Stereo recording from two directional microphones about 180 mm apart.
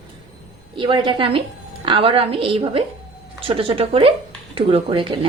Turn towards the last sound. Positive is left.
turn(degrees=-30)  # may be behind; listen again after turning